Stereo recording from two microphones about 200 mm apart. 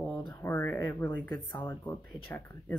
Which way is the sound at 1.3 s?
20° left (ahead or behind).